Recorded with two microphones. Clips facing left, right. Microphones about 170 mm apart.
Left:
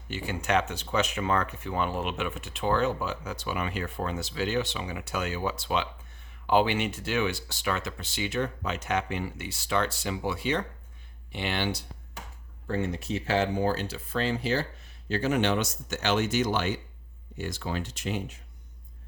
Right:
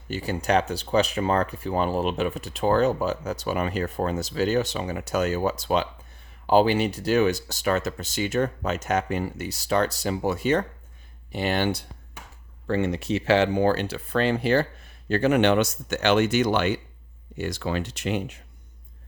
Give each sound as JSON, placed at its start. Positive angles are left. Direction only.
{"t": 0.1, "sound": "speech", "side_deg": -40}
{"t": 12.6, "sound": "speech", "side_deg": -85}